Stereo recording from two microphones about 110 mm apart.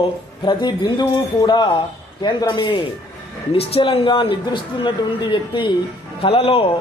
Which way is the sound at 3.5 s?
60° left (ahead or behind).